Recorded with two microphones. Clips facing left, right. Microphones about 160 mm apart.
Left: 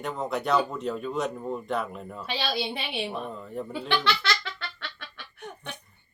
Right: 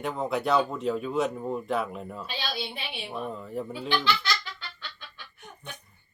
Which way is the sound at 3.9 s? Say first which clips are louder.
Left 1 dB; 75° left (ahead or behind).